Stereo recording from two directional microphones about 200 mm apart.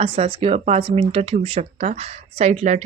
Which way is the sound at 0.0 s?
30° right (ahead or behind).